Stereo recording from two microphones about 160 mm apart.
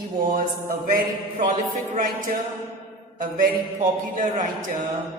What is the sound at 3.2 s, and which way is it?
Speech, 60° right (ahead or behind).